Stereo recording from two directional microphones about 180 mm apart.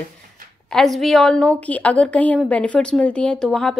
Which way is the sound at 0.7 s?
Centre (ahead or behind).